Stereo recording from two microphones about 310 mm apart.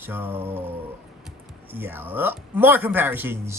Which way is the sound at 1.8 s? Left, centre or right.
Centre.